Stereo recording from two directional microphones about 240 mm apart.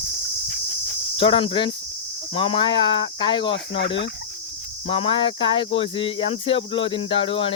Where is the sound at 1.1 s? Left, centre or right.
Left.